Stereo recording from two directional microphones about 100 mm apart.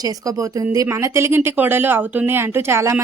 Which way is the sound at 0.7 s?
30° right (ahead or behind).